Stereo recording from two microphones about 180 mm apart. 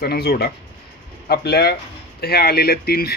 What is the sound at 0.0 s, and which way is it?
Speech, 60° left (ahead or behind).